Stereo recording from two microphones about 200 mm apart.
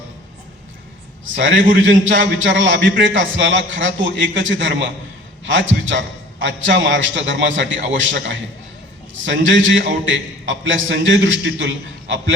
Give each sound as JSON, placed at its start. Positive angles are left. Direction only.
{"t": 1.4, "sound": "a man's voice", "side_deg": -65}